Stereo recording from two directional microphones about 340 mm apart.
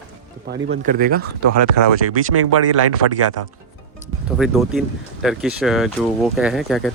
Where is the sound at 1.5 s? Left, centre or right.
Right.